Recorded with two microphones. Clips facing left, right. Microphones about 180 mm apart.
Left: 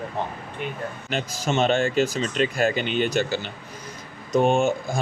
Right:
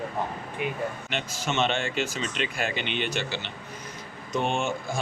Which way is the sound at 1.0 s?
40° left (ahead or behind).